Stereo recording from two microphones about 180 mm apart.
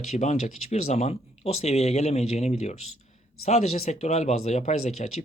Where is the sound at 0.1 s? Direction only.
40° left (ahead or behind).